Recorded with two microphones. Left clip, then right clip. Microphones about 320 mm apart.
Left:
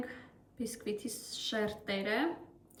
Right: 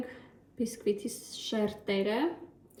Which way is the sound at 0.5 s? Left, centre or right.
Left.